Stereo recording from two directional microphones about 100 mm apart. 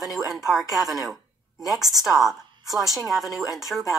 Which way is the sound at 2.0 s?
Centre (ahead or behind).